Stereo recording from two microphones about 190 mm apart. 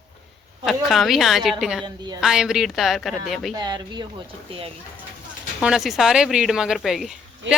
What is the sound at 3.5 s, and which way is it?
Speech, 20° right (ahead or behind).